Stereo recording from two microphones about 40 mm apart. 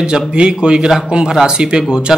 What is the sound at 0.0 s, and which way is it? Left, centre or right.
Speech, right.